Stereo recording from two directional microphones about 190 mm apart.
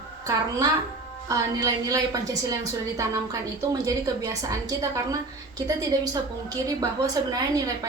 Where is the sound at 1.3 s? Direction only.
20° right (ahead or behind).